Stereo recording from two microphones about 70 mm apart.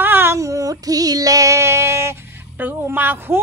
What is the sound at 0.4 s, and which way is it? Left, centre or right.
Female singing, right.